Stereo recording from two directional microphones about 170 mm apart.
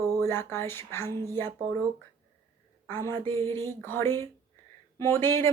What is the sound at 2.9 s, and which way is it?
Speech, 15° left (ahead or behind).